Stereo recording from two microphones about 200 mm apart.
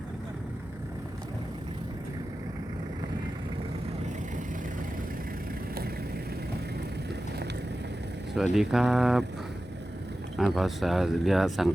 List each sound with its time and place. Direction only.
8.5 s speech: centre (ahead or behind)
10.3 s speech: centre (ahead or behind)